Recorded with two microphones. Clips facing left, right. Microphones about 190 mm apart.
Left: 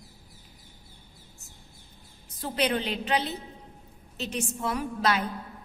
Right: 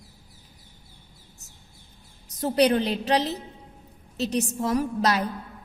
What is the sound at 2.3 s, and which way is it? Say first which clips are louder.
A woman's voice: right 7 dB; 40° right (ahead or behind).